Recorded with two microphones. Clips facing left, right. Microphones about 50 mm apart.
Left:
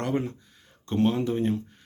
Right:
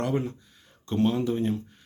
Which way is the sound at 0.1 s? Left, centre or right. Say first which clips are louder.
Even; left.